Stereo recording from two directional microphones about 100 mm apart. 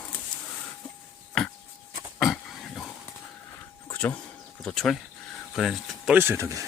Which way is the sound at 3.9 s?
15° left (ahead or behind).